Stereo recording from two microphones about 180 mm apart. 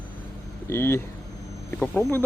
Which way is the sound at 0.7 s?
15° left (ahead or behind).